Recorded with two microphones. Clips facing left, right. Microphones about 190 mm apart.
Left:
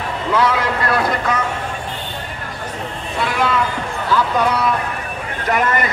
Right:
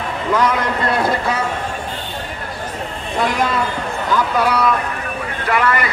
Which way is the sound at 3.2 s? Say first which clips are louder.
Right 1 dB; 40° right (ahead or behind).